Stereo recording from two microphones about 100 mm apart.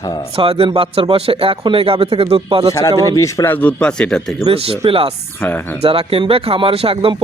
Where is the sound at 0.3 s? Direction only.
70° right (ahead or behind).